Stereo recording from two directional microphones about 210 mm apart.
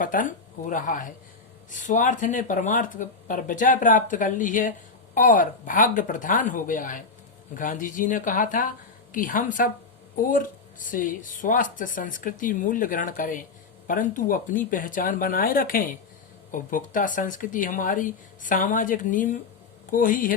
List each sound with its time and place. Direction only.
0.0 s speech: 40° left (ahead or behind)